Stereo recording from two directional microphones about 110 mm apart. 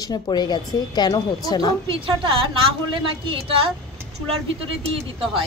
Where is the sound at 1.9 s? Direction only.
55° right (ahead or behind).